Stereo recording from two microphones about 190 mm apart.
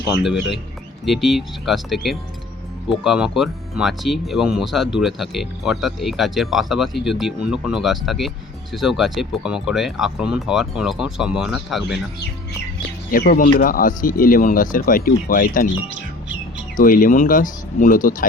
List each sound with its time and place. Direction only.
0.3 s speech: centre (ahead or behind)
13.1 s speech: 50° left (ahead or behind)
16.7 s speech: 45° left (ahead or behind)